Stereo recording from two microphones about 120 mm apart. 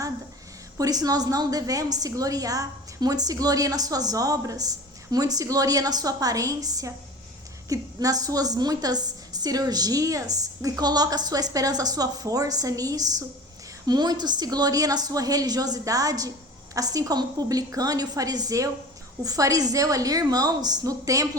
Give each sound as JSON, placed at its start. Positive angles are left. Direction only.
{"t": 0.8, "sound": "a woman's voice", "side_deg": -30}